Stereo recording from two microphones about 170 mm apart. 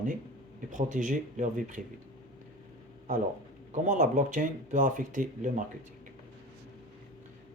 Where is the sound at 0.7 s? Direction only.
50° right (ahead or behind).